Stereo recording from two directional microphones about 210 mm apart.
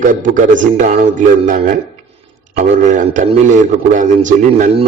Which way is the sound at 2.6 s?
35° right (ahead or behind).